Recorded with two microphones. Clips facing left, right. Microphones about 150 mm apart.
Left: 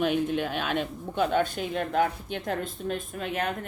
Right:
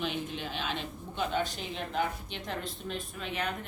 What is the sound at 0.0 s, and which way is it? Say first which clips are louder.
Speech: left 9 dB; 50° left (ahead or behind).